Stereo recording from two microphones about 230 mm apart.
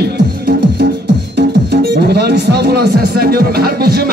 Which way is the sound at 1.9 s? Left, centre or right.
Right.